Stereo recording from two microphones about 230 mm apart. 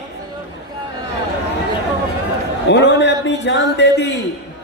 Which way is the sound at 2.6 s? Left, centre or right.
Left.